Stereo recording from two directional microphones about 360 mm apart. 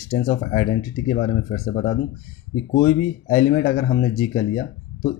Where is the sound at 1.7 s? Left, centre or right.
Centre.